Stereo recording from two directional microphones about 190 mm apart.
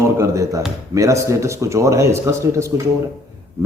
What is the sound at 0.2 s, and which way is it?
A man's voice, 15° right (ahead or behind).